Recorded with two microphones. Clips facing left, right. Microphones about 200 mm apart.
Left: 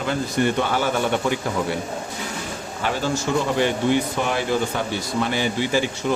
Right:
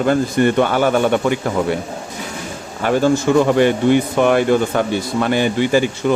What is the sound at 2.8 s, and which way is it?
Speech, 50° right (ahead or behind).